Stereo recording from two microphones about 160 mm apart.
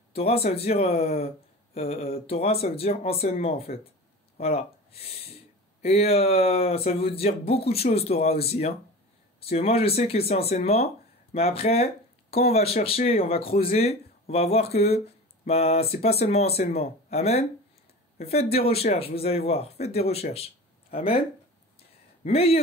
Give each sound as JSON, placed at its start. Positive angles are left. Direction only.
{"t": 0.1, "sound": "speech", "side_deg": 40}
{"t": 22.2, "sound": "speech", "side_deg": 40}